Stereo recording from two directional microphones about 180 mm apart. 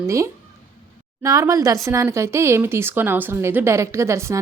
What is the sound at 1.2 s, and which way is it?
Speech, 20° right (ahead or behind).